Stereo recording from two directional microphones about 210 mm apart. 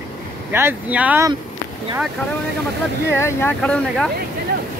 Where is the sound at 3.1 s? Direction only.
10° left (ahead or behind).